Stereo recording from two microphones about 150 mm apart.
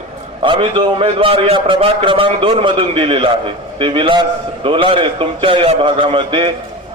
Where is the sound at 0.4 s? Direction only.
35° right (ahead or behind).